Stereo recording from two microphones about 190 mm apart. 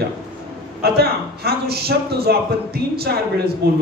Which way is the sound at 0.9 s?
55° right (ahead or behind).